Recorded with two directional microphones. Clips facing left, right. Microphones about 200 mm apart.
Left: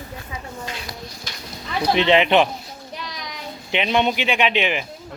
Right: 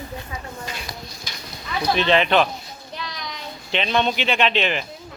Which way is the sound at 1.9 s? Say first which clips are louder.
Left 2 dB; 20° left (ahead or behind).